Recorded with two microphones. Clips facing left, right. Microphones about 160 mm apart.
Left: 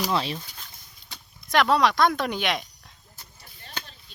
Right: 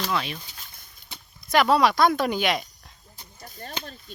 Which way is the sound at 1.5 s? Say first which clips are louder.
Right 1 dB; 5° right (ahead or behind).